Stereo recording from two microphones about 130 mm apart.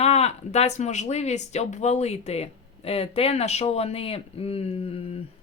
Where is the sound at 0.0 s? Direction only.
55° left (ahead or behind).